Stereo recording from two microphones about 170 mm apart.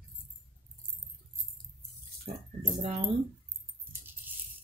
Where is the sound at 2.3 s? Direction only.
40° right (ahead or behind).